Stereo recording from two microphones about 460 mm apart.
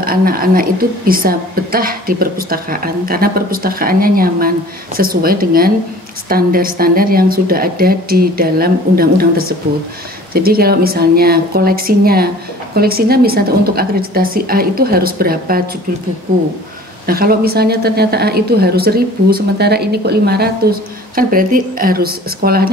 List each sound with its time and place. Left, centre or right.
0.0 s a woman's voice: centre
10.3 s a woman's voice: centre
17.0 s a woman's voice: centre